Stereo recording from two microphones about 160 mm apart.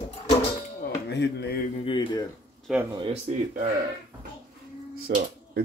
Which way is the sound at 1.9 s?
30° left (ahead or behind).